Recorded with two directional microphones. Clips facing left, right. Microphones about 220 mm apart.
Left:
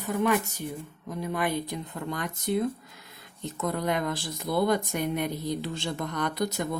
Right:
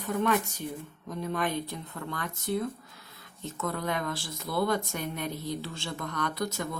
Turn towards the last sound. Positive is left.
turn(degrees=20)  # may be behind; listen again after turning